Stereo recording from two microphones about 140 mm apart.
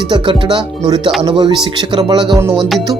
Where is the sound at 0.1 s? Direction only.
35° right (ahead or behind).